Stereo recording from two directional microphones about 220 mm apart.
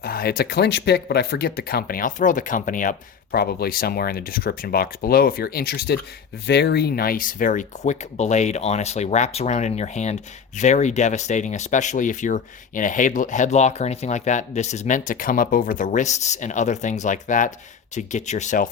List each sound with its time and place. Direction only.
0.0 s speech: 45° left (ahead or behind)